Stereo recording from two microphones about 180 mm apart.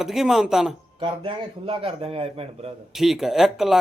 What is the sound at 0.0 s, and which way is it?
Speech, centre (ahead or behind).